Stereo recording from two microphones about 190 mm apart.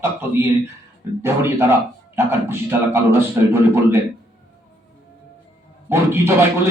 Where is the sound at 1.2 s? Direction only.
15° right (ahead or behind).